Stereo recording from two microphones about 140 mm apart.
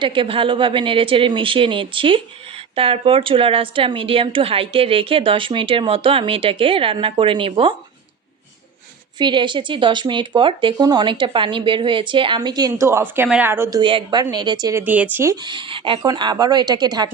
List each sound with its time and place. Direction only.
0.0 s a woman's voice: 35° right (ahead or behind)
9.1 s a woman's voice: 35° right (ahead or behind)
13.8 s speech: 35° right (ahead or behind); by 15.4 s 15° right (ahead or behind)
15.4 s a woman's voice: 35° right (ahead or behind)